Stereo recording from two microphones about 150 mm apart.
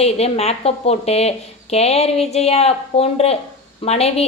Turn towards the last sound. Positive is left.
turn(degrees=45)  # may be behind; listen again after turning